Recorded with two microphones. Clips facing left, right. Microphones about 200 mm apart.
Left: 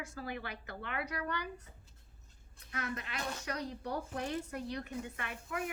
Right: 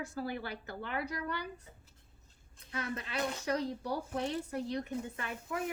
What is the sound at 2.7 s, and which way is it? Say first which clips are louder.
A woman's voice: right 3 dB; 30° right (ahead or behind).